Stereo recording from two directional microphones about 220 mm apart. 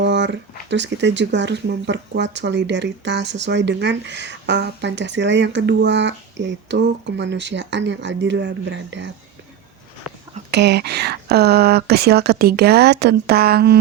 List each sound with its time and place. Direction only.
0.0 s speech: 50° right (ahead or behind)
10.5 s speech: 50° right (ahead or behind)